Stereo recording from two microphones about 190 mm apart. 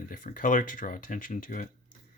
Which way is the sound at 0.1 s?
45° left (ahead or behind).